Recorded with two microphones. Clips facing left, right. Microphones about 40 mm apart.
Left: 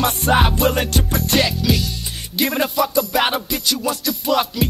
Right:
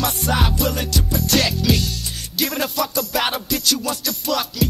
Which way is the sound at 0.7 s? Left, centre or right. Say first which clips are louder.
Left 3 dB; left.